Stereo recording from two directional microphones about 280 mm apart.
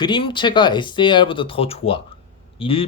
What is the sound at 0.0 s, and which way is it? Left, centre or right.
Speech, centre.